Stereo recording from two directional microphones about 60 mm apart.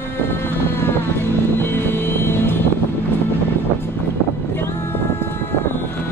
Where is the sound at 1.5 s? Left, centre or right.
Left.